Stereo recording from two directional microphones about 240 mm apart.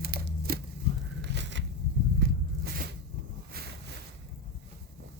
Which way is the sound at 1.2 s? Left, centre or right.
Right.